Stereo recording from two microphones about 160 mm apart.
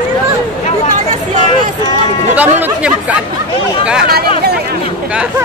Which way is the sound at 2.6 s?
10° right (ahead or behind).